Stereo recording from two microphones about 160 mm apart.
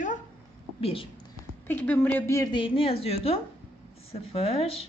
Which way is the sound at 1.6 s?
10° left (ahead or behind).